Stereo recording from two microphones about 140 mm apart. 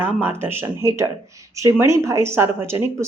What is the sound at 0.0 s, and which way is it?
Speech, 15° right (ahead or behind).